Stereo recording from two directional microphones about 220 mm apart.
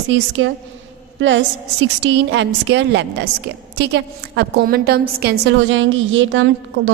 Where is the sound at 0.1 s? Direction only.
55° right (ahead or behind).